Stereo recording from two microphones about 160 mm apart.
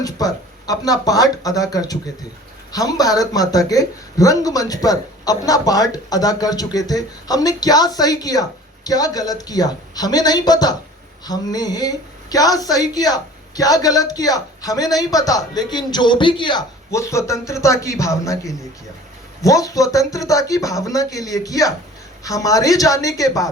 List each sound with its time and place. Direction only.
0.0 s speech: 20° left (ahead or behind)
16.9 s speech: 20° left (ahead or behind)